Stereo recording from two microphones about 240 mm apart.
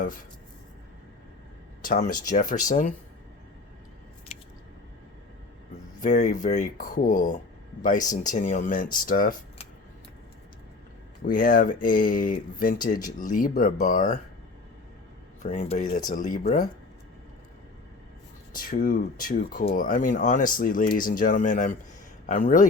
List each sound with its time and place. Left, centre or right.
1.8 s speech: left
6.0 s speech: left
11.3 s speech: left
15.4 s speech: left
18.5 s speech: left